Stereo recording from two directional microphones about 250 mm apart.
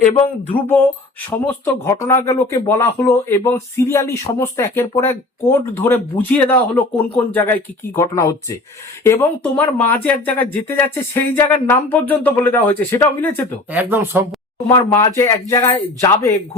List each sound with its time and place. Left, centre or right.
1.5 s speech: centre
13.7 s speech: centre
14.8 s speech: centre